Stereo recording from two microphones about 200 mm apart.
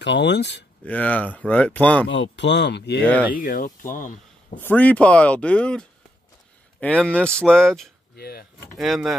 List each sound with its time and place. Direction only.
0.0 s speech: 60° left (ahead or behind)
0.8 s speech: 10° left (ahead or behind)
2.0 s speech: 65° left (ahead or behind)
3.3 s speech: 45° left (ahead or behind)
4.6 s speech: 10° left (ahead or behind)
8.2 s speech: 50° left (ahead or behind)
8.5 s speech: centre (ahead or behind)